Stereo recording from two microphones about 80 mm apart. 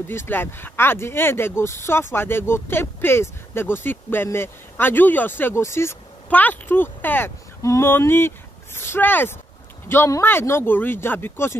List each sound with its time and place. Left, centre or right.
0.1 s speech: left
6.3 s speech: left
7.6 s a sound: left
8.7 s speech: left